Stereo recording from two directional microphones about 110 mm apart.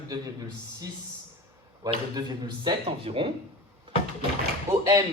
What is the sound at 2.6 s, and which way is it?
Speech, 55° right (ahead or behind).